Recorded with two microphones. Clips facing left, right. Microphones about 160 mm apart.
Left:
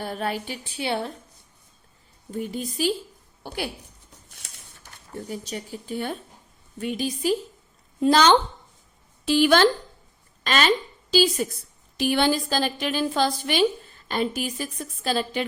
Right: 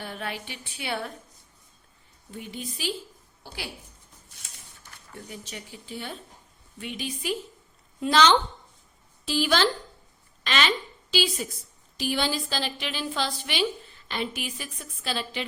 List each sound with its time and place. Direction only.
0.0 s a woman's voice: 40° left (ahead or behind)
2.3 s a woman's voice: 40° left (ahead or behind)
3.4 s a woman's voice: 55° left (ahead or behind)
5.1 s a woman's voice: 40° left (ahead or behind)
9.2 s speech: 60° left (ahead or behind)
10.4 s a woman's voice: 45° left (ahead or behind)
11.9 s a woman's voice: 60° left (ahead or behind)